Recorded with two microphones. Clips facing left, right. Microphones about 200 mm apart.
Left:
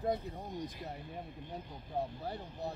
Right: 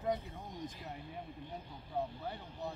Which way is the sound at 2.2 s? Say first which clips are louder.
Left 2 dB; 40° left (ahead or behind).